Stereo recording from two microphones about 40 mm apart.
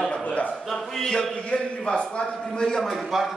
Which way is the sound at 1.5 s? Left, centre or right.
Left.